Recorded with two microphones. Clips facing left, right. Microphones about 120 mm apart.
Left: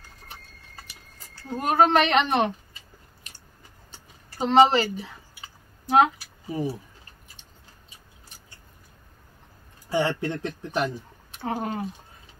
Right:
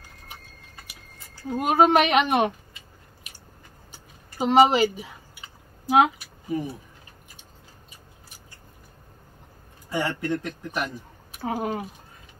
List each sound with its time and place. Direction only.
1.3 s a woman's voice: 10° right (ahead or behind)
4.4 s a woman's voice: 10° right (ahead or behind)
6.1 s a sound: 30° left (ahead or behind)
9.8 s speech: 30° left (ahead or behind)
11.3 s a woman's voice: 5° right (ahead or behind)